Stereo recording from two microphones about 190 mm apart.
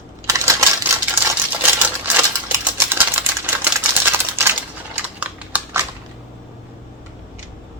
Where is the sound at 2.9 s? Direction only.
10° right (ahead or behind).